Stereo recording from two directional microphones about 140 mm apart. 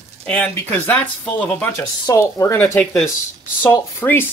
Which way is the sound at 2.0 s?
25° left (ahead or behind).